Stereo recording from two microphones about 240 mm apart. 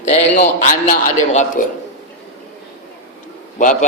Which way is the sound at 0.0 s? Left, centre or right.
Left.